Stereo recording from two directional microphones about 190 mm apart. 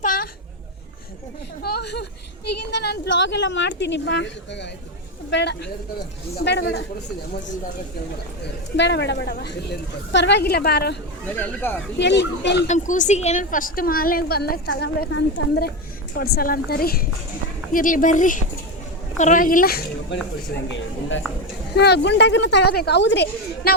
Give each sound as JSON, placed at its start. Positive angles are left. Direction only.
{"t": 1.6, "sound": "a sound", "side_deg": 60}
{"t": 2.6, "sound": "a woman's voice", "side_deg": 60}
{"t": 8.7, "sound": "a woman's voice", "side_deg": 65}
{"t": 11.3, "sound": "speech", "side_deg": 10}
{"t": 11.9, "sound": "a woman's voice", "side_deg": 65}
{"t": 12.6, "sound": "a woman's voice", "side_deg": 40}
{"t": 20.7, "sound": "a woman's voice", "side_deg": 80}
{"t": 21.8, "sound": "a woman's voice", "side_deg": 60}